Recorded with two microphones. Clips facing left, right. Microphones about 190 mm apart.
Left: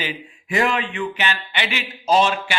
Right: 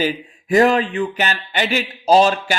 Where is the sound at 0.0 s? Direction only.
40° right (ahead or behind).